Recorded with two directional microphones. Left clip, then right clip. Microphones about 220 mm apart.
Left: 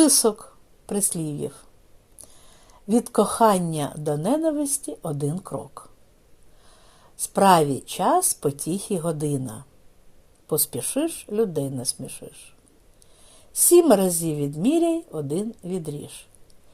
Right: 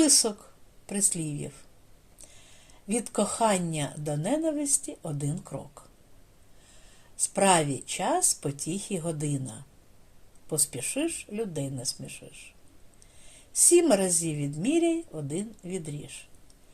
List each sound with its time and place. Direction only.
0.0 s a woman's voice: 30° left (ahead or behind)
2.6 s a woman's voice: 30° left (ahead or behind)
7.3 s a woman's voice: 35° left (ahead or behind)
10.5 s a woman's voice: 30° left (ahead or behind)
13.8 s a woman's voice: 35° left (ahead or behind)